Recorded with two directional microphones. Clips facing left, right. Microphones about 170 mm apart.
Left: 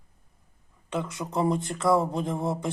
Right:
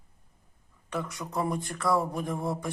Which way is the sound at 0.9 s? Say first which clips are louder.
Left 3 dB; 25° left (ahead or behind).